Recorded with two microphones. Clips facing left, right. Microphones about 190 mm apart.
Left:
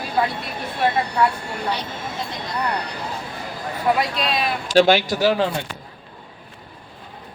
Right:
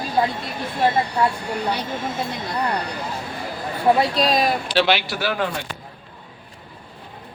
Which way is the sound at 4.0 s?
35° right (ahead or behind).